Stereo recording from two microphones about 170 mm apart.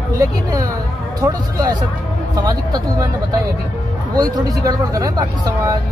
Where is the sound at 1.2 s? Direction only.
25° right (ahead or behind).